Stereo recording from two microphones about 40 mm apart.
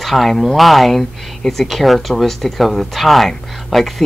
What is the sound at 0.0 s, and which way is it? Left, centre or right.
Speech, centre.